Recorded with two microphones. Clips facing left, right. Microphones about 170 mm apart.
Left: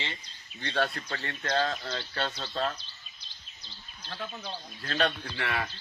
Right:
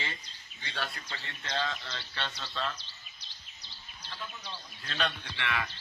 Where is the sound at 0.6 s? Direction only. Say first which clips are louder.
Left 9 dB; 65° left (ahead or behind); by 2.4 s 45° left (ahead or behind).